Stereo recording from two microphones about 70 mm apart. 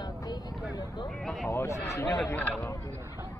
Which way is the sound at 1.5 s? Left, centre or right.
Left.